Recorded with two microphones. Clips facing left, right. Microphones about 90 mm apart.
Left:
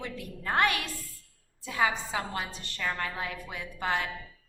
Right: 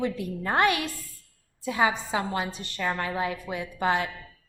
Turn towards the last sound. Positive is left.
turn(degrees=-20)  # may be behind; listen again after turning